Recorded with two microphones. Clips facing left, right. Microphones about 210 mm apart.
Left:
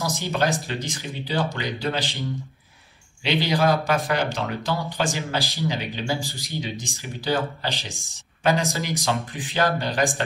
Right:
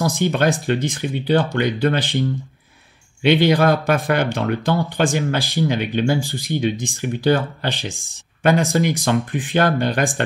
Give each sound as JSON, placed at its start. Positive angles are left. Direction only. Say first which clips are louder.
{"t": 0.0, "sound": "speech", "louder": "right 6 dB", "side_deg": -55}
{"t": 3.3, "sound": "speech", "louder": "right 6 dB", "side_deg": -55}
{"t": 8.7, "sound": "speech", "louder": "right 8 dB", "side_deg": -55}